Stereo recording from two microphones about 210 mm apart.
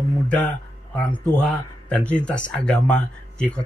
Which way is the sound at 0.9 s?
5° left (ahead or behind).